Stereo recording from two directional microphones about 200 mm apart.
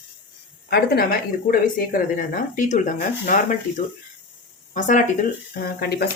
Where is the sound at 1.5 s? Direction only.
45° left (ahead or behind).